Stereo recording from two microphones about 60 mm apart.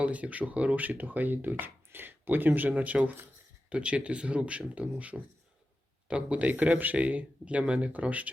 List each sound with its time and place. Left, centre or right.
0.0 s speech: right